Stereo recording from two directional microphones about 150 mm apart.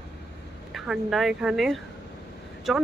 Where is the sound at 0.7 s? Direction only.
Centre (ahead or behind).